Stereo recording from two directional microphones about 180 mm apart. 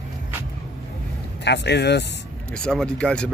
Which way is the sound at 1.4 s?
70° left (ahead or behind).